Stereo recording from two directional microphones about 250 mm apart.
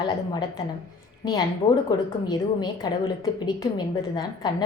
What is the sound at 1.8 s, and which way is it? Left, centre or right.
A woman's voice, centre.